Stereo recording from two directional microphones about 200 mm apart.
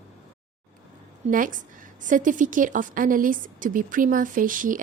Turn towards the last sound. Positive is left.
turn(degrees=-40)  # may be behind; listen again after turning